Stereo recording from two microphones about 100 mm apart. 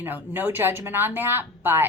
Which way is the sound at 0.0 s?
20° right (ahead or behind).